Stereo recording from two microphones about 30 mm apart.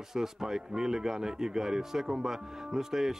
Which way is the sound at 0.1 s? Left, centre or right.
Centre.